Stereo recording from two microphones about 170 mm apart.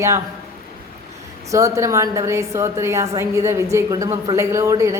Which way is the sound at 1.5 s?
20° right (ahead or behind).